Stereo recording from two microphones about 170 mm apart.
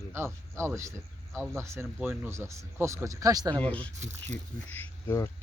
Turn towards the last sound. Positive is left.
turn(degrees=15)  # may be behind; listen again after turning